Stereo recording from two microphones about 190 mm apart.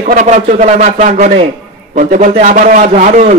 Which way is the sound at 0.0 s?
40° right (ahead or behind).